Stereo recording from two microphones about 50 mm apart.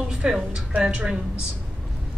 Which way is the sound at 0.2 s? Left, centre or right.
Centre.